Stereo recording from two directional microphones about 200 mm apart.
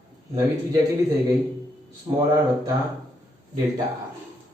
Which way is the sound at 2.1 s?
20° right (ahead or behind).